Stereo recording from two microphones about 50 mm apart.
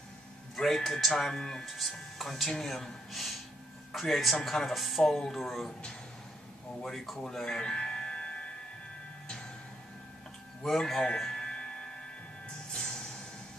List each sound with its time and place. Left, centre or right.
0.6 s speech: centre
1.7 s speech: centre
5.7 s speech: centre
6.8 s speech: centre
7.2 s music: centre
10.6 s speech: centre
11.4 s music: centre